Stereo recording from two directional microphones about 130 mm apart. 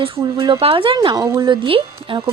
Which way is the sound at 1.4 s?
40° right (ahead or behind).